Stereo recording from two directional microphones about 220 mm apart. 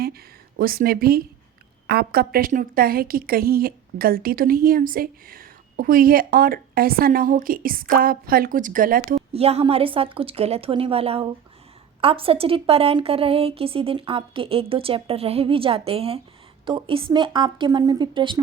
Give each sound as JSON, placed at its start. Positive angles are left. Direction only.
{"t": 0.6, "sound": "a woman's voice", "side_deg": -40}
{"t": 9.3, "sound": "a woman's voice", "side_deg": -25}